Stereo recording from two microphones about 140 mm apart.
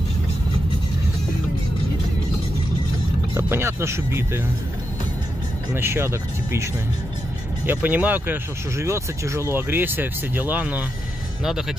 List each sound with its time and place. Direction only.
3.3 s speech: 20° right (ahead or behind)
5.7 s speech: 15° right (ahead or behind)